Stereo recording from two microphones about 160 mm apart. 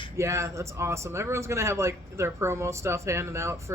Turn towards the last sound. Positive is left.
turn(degrees=-15)  # may be behind; listen again after turning